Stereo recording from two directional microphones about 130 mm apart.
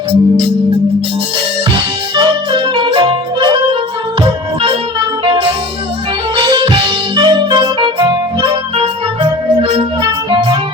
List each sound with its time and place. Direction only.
2.1 s music: 40° right (ahead or behind)
6.6 s music: 40° right (ahead or behind)
9.6 s music: 45° right (ahead or behind)